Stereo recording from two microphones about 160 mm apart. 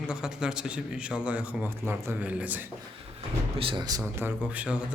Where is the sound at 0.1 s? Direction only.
5° right (ahead or behind).